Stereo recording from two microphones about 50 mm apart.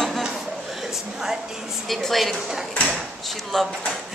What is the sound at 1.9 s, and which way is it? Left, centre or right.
Speech, centre.